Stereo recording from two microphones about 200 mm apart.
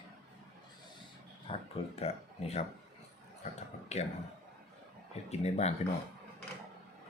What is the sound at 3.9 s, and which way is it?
Speech, 35° left (ahead or behind).